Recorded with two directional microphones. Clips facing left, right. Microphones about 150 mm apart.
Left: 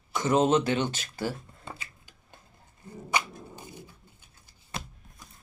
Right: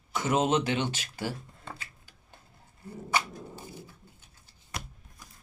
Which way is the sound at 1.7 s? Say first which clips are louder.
Left 1 dB; 15° left (ahead or behind).